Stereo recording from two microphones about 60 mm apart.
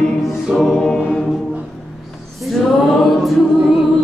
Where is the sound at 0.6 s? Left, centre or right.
Centre.